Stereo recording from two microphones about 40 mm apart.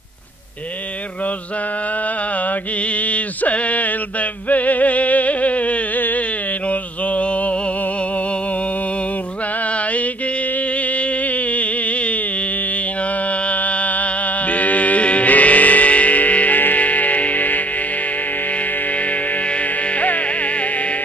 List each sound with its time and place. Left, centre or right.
2.3 s mantra: left
5.9 s a sound: left
6.7 s mantra: left
9.6 s mantra: left
13.3 s music: left
18.5 s insect: left